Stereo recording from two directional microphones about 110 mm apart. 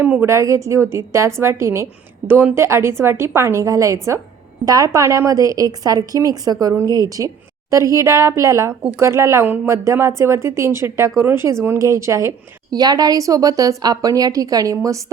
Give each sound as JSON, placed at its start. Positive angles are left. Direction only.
{"t": 0.0, "sound": "a woman's voice", "side_deg": -20}